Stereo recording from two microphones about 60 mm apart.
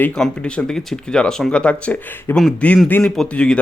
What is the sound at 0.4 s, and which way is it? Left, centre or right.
Speech, centre.